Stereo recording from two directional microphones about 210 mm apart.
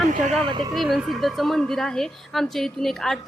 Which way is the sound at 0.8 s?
Centre (ahead or behind).